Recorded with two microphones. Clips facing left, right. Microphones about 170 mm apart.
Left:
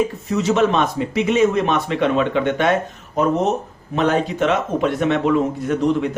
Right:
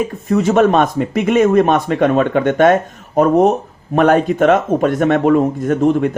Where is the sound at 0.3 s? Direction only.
55° right (ahead or behind).